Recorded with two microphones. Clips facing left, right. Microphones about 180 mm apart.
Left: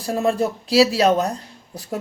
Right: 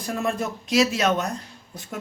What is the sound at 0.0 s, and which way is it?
A woman's voice, 30° left (ahead or behind).